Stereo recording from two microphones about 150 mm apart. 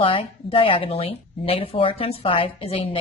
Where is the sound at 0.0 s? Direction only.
35° left (ahead or behind).